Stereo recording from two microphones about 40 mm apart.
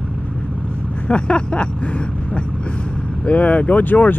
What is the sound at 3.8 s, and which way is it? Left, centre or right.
Speech, left.